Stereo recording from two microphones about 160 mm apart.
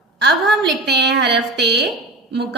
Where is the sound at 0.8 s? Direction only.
90° right.